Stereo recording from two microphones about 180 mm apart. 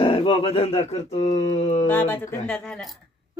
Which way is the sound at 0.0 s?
30° left (ahead or behind).